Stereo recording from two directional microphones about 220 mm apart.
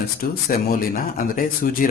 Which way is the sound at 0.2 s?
45° left (ahead or behind).